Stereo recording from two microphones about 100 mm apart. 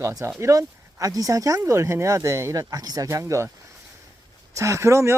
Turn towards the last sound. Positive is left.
turn(degrees=-30)  # may be behind; listen again after turning